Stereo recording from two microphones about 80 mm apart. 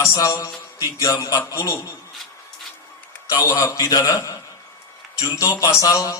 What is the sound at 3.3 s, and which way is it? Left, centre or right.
A man's voice, left.